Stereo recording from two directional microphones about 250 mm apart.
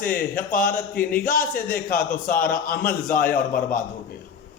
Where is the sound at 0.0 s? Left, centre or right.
Left.